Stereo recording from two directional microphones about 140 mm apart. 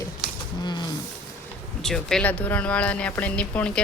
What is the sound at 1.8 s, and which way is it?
Speech, 5° left (ahead or behind).